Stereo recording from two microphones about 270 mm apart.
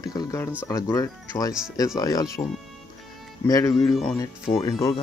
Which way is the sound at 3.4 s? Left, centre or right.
Centre.